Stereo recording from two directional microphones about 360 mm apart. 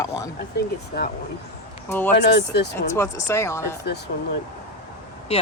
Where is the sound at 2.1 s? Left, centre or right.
Left.